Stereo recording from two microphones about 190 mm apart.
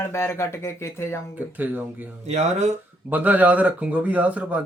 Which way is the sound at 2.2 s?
35° right (ahead or behind).